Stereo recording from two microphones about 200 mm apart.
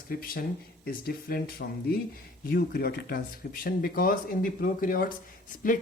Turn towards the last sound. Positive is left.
turn(degrees=40)  # may be behind; listen again after turning